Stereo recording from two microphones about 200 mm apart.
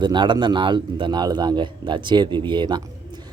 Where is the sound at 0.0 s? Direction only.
25° right (ahead or behind).